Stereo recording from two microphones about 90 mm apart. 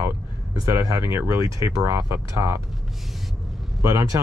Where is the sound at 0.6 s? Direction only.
35° right (ahead or behind).